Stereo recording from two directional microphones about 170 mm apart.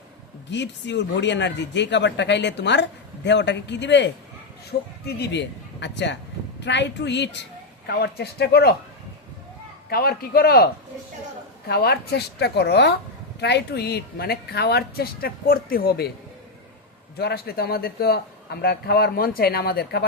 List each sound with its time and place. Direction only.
0.5 s a man's voice: 90° left
4.7 s speech: 55° left (ahead or behind)
5.0 s a man's voice: 80° left
7.9 s a man's voice: 70° left (ahead or behind)
9.9 s speech: 65° left (ahead or behind)
11.7 s a man's voice: 70° left (ahead or behind)
17.2 s a man's voice: 70° left (ahead or behind)